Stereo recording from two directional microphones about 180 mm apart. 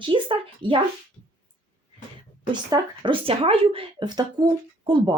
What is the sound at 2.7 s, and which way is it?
Speech, 30° right (ahead or behind).